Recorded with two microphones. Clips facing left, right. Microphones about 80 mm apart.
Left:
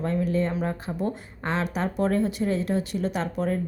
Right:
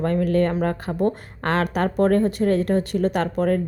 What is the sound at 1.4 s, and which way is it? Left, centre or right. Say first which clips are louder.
Speech: right 6 dB; right.